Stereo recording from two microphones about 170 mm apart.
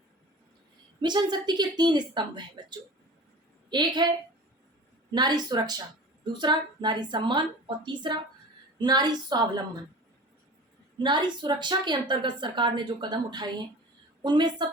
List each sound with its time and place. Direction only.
1.0 s a woman's voice: 25° right (ahead or behind)
5.1 s a woman's voice: 25° right (ahead or behind)
10.9 s a woman's voice: 25° right (ahead or behind)